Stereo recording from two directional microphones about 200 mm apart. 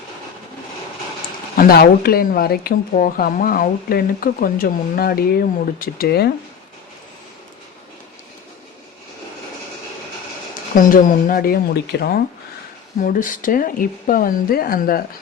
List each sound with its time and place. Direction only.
1.5 s speech: 50° left (ahead or behind)
10.8 s speech: 45° left (ahead or behind)